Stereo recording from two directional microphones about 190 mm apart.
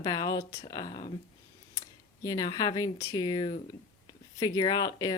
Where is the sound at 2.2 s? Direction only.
20° left (ahead or behind).